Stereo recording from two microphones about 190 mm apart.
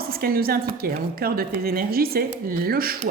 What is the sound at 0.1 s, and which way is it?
A woman's voice, 50° right (ahead or behind).